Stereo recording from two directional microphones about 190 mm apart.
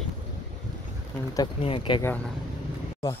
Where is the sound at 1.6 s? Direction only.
30° left (ahead or behind).